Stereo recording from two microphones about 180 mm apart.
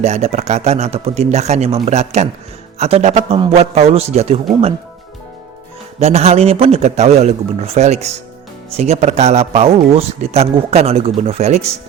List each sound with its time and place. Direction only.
0.0 s speech: 35° right (ahead or behind)
6.0 s speech: 35° right (ahead or behind)